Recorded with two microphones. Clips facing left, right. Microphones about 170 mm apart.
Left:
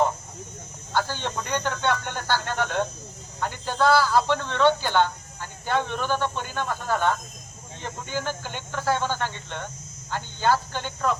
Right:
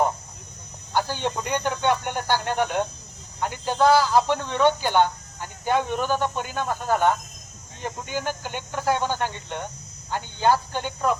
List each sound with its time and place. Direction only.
0.9 s speech: 15° right (ahead or behind)